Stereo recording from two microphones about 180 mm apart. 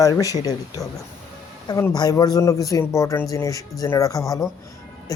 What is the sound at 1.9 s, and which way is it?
Speech, 20° left (ahead or behind).